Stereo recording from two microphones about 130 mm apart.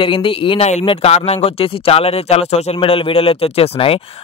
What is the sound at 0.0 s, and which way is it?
Speech, 40° left (ahead or behind).